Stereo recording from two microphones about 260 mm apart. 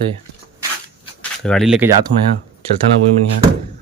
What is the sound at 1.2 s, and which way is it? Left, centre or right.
Speech, centre.